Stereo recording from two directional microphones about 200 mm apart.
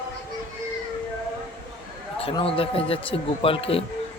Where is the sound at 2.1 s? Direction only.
30° left (ahead or behind).